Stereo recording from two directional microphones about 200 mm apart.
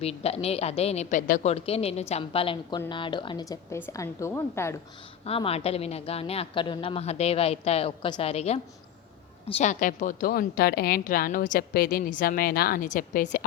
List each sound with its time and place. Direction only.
0.0 s a woman's voice: 30° left (ahead or behind); by 4.8 s 15° left (ahead or behind)
5.2 s a woman's voice: 30° left (ahead or behind)